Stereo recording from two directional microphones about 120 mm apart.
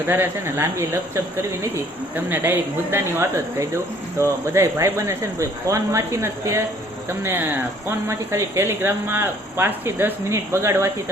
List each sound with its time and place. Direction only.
0.1 s speech: 20° right (ahead or behind)